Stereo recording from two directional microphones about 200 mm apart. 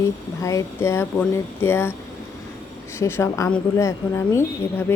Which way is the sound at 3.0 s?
10° left (ahead or behind).